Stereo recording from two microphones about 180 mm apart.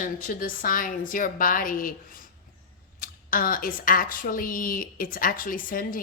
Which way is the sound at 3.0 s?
50° left (ahead or behind).